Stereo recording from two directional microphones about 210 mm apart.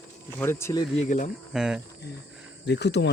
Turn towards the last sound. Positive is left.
turn(degrees=55)  # may be behind; listen again after turning